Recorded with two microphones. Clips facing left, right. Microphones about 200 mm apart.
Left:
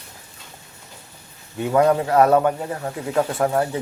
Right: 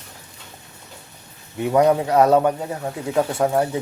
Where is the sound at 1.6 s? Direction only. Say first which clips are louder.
Right 1 dB; 15° right (ahead or behind).